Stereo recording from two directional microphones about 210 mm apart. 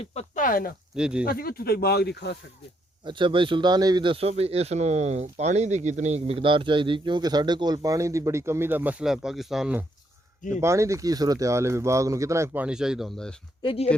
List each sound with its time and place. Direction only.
0.0 s speech: 30° left (ahead or behind)
0.9 s speech: 5° right (ahead or behind)
1.2 s speech: 45° left (ahead or behind)
3.0 s speech: 25° right (ahead or behind); by 13.3 s centre (ahead or behind)
13.6 s speech: 25° left (ahead or behind)